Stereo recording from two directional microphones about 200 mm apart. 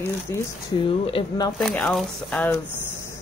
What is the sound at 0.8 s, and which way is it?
Speech, 25° left (ahead or behind).